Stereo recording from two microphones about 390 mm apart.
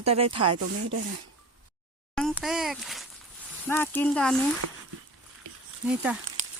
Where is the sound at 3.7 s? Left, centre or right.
Centre.